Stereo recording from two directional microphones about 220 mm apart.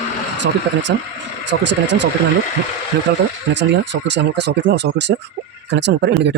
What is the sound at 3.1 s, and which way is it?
Speech, 45° right (ahead or behind).